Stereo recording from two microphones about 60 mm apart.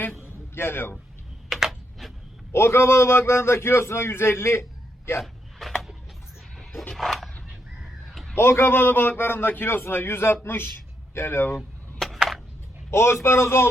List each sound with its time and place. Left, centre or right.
0.2 s music: left
1.5 s computer keyboard: centre
2.5 s a man's voice: left
5.2 s a sound: centre
6.9 s dog: centre
8.4 s a man's voice: left
11.9 s a sound: centre
12.9 s a man's voice: left